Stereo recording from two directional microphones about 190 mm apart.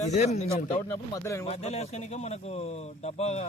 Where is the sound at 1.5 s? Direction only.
35° left (ahead or behind).